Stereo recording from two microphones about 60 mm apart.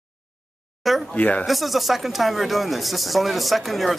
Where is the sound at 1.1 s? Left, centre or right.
Left.